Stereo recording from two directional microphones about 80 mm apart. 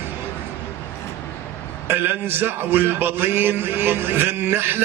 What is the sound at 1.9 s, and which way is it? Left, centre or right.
A man's voice, right.